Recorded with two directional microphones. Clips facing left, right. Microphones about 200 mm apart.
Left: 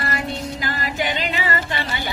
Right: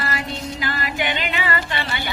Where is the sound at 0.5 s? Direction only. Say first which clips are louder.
Even; 40° left (ahead or behind).